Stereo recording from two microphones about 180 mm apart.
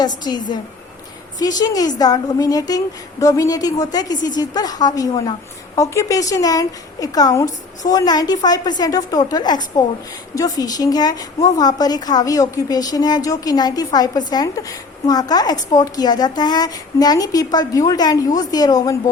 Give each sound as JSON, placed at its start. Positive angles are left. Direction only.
{"t": 0.3, "sound": "a woman's voice", "side_deg": 20}